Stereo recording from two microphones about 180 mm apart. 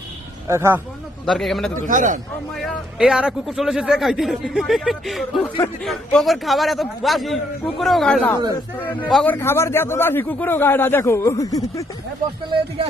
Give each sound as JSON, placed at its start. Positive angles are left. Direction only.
{"t": 0.4, "sound": "speech", "side_deg": -15}
{"t": 1.2, "sound": "a man's voice", "side_deg": 0}
{"t": 1.9, "sound": "a man's voice", "side_deg": -45}
{"t": 3.0, "sound": "a man's voice", "side_deg": -5}